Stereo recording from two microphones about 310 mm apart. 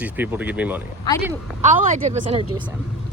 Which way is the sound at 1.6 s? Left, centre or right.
Right.